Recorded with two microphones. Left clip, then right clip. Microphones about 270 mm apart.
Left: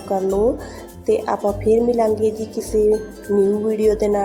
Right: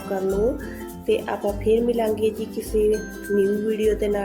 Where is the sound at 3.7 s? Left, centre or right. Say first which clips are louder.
Left 4 dB; centre.